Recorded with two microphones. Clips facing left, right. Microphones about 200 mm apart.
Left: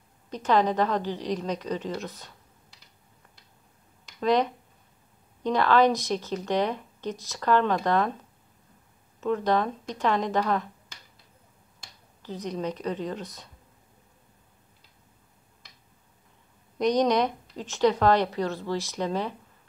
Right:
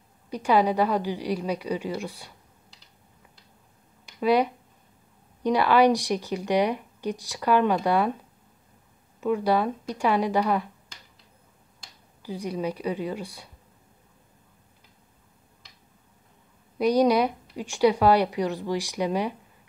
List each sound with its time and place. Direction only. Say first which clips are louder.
0.3 s speech: right 2 dB; 10° right (ahead or behind)
4.2 s speech: right 2 dB; 10° right (ahead or behind)
9.2 s speech: right 2 dB; 10° right (ahead or behind)
12.2 s speech: right 2 dB; 10° right (ahead or behind)
16.7 s speech: right 2 dB; 10° right (ahead or behind)